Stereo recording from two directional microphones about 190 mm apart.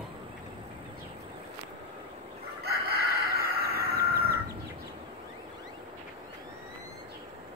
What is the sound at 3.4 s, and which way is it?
Crowing, 55° right (ahead or behind).